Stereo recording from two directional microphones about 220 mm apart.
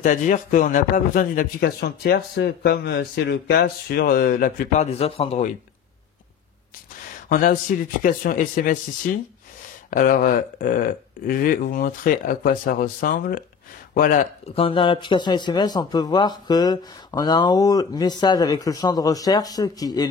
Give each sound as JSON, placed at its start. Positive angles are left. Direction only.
{"t": 0.0, "sound": "speech", "side_deg": 35}
{"t": 4.9, "sound": "speech", "side_deg": 25}
{"t": 7.2, "sound": "speech", "side_deg": 40}
{"t": 9.8, "sound": "speech", "side_deg": 40}